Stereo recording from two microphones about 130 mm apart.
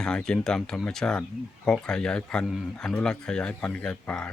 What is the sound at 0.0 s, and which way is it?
Speech, 5° left (ahead or behind).